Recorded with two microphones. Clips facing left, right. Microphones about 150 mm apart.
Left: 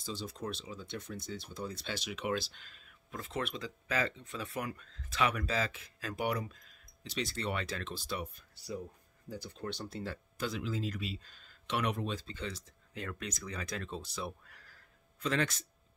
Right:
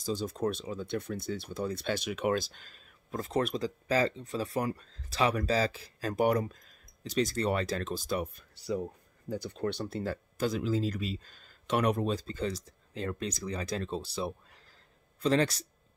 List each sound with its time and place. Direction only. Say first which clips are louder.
0.0 s speech: right 9 dB; 45° right (ahead or behind)
9.3 s speech: right 8 dB; 60° right (ahead or behind); by 15.6 s 35° right (ahead or behind)